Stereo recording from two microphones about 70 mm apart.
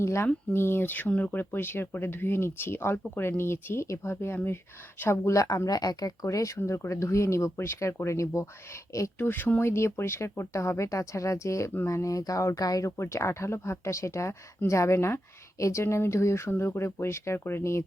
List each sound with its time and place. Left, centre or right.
0.0 s speech: left
6.2 s speech: left
6.6 s speech: left
9.1 s speech: left
13.0 s speech: left